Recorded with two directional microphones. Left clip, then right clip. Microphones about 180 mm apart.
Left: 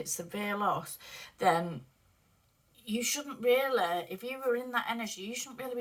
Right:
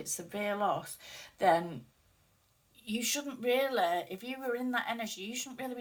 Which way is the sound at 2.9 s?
20° right (ahead or behind).